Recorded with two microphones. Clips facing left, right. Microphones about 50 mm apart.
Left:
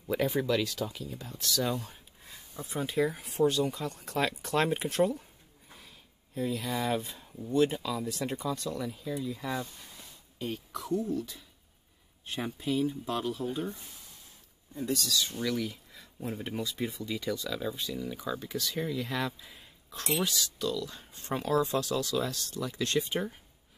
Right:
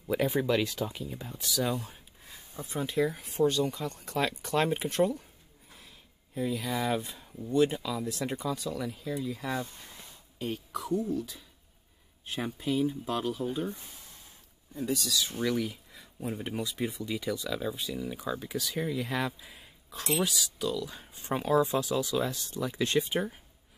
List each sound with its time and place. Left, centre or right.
0.1 s speech: centre
9.5 s speech: centre
10.4 s speech: centre
13.7 s speech: right
14.7 s speech: centre